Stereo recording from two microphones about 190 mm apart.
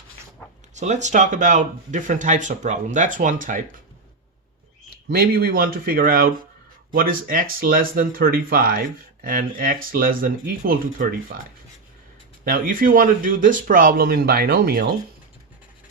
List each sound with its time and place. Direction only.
0.7 s speech: 40° right (ahead or behind)
5.0 s speech: 55° right (ahead or behind)
12.5 s speech: 45° right (ahead or behind)